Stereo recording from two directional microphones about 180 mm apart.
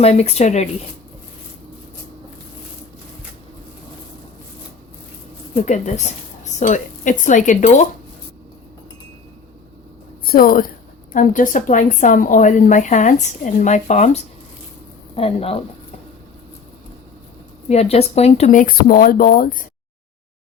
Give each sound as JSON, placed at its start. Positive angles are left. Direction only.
{"t": 0.0, "sound": "speech", "side_deg": 35}
{"t": 5.5, "sound": "a woman's voice", "side_deg": 40}
{"t": 10.2, "sound": "a woman's voice", "side_deg": 55}
{"t": 17.7, "sound": "a woman's voice", "side_deg": 35}